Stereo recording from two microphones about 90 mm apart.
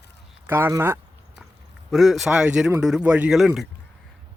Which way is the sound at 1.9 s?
Centre (ahead or behind).